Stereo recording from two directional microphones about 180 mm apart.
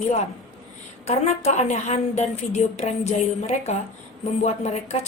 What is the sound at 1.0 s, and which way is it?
A woman's voice, 40° left (ahead or behind).